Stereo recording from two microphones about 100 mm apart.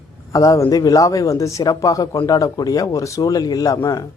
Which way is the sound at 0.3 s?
35° left (ahead or behind).